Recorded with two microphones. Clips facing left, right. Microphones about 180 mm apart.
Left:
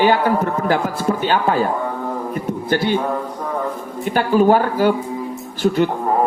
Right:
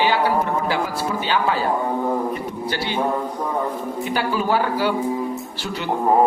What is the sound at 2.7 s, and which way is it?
Speech, 50° left (ahead or behind).